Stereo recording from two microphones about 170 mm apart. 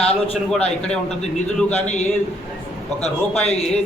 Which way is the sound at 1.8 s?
40° left (ahead or behind).